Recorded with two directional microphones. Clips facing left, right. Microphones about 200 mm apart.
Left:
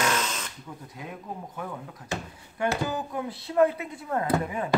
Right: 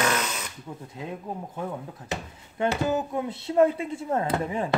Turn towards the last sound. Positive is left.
turn(degrees=-25)  # may be behind; listen again after turning